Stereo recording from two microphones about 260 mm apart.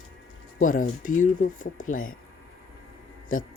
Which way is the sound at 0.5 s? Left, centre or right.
Left.